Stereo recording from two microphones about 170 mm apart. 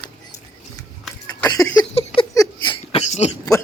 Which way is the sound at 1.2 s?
20° left (ahead or behind).